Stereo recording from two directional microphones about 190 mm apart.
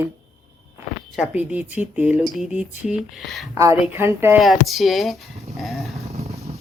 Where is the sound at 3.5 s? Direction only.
15° right (ahead or behind).